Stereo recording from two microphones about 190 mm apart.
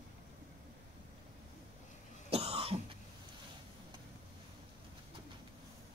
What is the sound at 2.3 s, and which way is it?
Cough, 30° right (ahead or behind).